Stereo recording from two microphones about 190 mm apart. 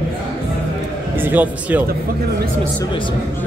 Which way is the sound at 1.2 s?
10° right (ahead or behind).